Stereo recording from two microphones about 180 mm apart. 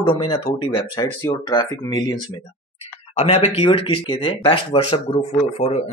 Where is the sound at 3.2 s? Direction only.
35° left (ahead or behind).